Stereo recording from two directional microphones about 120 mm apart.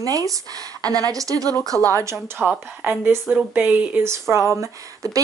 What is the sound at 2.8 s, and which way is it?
Speech, 15° right (ahead or behind).